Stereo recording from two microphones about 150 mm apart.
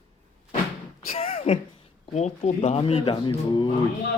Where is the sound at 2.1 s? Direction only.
50° left (ahead or behind).